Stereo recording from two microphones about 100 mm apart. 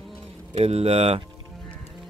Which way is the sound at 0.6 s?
85° right.